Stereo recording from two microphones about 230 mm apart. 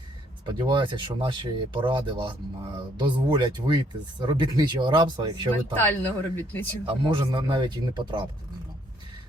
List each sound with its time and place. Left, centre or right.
0.4 s speech: right
5.7 s speech: centre
7.1 s speech: right